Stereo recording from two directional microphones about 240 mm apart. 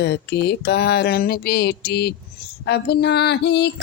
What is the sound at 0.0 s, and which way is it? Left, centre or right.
Female singing, left.